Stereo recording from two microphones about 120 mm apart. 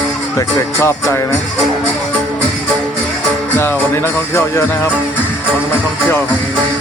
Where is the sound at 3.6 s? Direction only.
20° left (ahead or behind).